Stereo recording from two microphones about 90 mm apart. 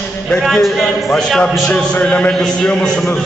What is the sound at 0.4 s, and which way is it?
A man's voice, centre (ahead or behind).